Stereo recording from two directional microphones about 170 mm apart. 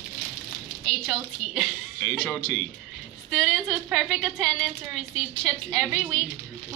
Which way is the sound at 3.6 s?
10° right (ahead or behind).